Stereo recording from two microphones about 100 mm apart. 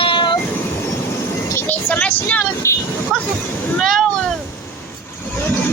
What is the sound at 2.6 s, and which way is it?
Speech, 30° left (ahead or behind).